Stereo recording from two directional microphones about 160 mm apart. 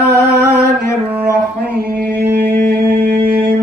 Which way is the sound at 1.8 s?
80° right.